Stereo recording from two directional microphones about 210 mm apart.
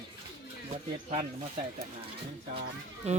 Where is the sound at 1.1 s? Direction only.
30° right (ahead or behind).